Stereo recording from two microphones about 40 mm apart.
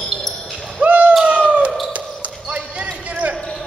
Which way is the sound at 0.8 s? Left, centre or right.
Right.